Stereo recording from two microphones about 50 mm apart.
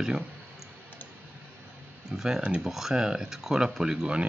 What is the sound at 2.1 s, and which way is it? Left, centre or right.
Speech, centre.